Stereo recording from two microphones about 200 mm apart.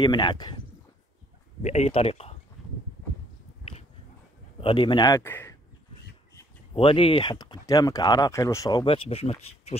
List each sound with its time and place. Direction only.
0.0 s speech: 20° left (ahead or behind)
1.6 s speech: 35° left (ahead or behind)
4.6 s a man's voice: 25° left (ahead or behind)
6.7 s speech: 30° left (ahead or behind)